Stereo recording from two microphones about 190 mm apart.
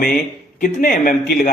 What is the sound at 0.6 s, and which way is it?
Speech, 45° left (ahead or behind).